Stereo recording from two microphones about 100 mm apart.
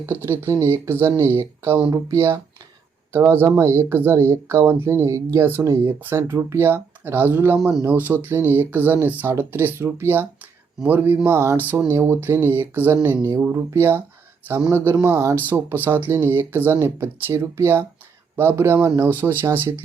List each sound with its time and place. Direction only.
0.0 s speech: 25° right (ahead or behind)